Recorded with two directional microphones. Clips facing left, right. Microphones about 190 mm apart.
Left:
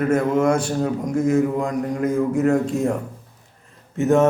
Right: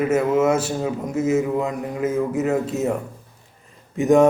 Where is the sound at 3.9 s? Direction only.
15° right (ahead or behind).